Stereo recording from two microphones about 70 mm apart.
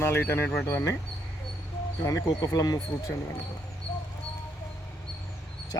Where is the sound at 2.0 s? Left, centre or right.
Left.